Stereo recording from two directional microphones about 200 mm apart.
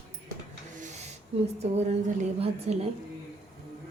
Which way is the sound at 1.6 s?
35° right (ahead or behind).